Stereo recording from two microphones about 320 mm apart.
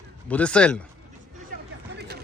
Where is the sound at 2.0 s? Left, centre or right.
Right.